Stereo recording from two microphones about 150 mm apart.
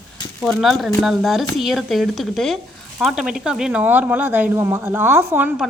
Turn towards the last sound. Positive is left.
turn(degrees=-15)  # may be behind; listen again after turning